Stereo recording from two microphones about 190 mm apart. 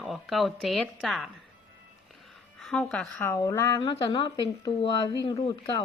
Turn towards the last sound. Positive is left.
turn(degrees=25)  # may be behind; listen again after turning